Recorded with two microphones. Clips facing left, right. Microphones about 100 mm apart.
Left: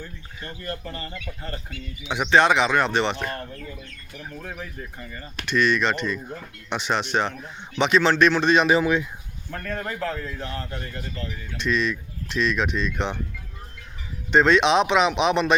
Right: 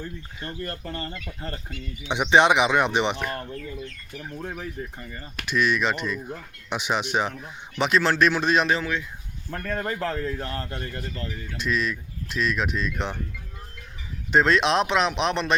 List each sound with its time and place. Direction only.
0.4 s speech: 35° right (ahead or behind)
2.0 s speech: 20° right (ahead or behind)
5.4 s speech: 5° right (ahead or behind)
8.7 s speech: 15° left (ahead or behind)
9.6 s speech: 35° right (ahead or behind)
11.5 s speech: 5° right (ahead or behind)
14.3 s speech: centre (ahead or behind)